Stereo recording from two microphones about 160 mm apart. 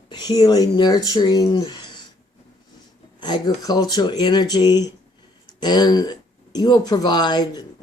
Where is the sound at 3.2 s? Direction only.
30° left (ahead or behind).